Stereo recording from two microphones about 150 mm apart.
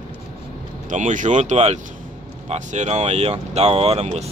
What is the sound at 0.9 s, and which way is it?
Speech, 55° right (ahead or behind).